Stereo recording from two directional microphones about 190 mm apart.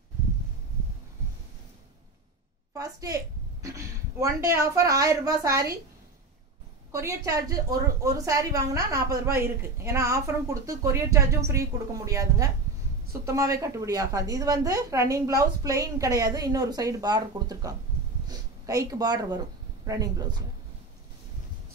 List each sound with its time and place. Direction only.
2.7 s a woman's voice: 15° right (ahead or behind)
6.9 s a woman's voice: 15° right (ahead or behind)